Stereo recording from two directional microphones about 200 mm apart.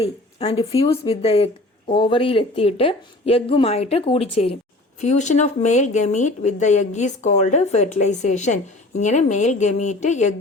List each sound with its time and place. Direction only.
0.0 s speech: 30° left (ahead or behind)